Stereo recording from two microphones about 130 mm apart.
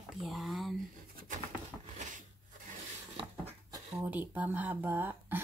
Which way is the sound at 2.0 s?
75° right (ahead or behind).